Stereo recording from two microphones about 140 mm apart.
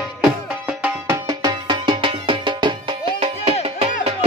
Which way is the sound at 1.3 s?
30° right (ahead or behind).